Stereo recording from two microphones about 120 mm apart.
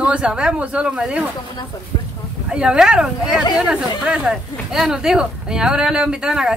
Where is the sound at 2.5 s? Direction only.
5° right (ahead or behind).